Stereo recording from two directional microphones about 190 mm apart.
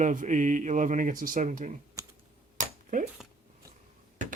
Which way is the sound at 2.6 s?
40° right (ahead or behind).